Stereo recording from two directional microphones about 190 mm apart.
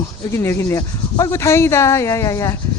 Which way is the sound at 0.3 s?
15° left (ahead or behind).